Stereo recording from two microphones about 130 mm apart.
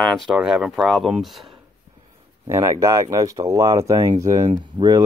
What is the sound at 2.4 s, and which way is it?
Speech, 25° right (ahead or behind).